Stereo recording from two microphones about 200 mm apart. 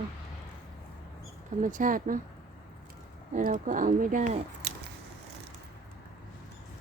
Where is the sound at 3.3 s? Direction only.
40° right (ahead or behind).